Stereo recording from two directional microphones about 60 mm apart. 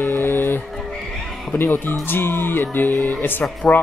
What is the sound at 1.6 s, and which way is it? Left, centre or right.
Music, left.